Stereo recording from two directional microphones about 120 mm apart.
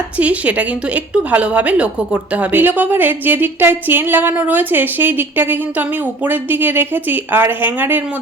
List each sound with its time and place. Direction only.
0.2 s a woman's voice: 10° right (ahead or behind)